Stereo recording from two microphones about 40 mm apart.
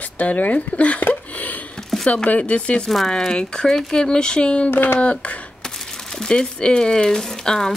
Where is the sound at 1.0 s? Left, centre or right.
Left.